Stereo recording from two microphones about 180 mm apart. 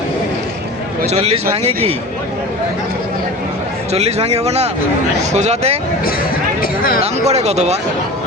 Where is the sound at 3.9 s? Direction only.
35° right (ahead or behind).